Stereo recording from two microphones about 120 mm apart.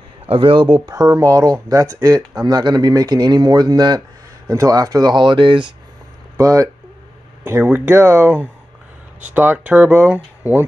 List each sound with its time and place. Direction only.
0.3 s speech: 45° right (ahead or behind)
0.8 s speech: 30° right (ahead or behind)
2.4 s speech: 35° right (ahead or behind)
6.3 s speech: 25° right (ahead or behind)